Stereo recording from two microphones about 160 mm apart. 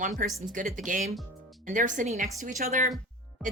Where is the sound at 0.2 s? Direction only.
60° right (ahead or behind).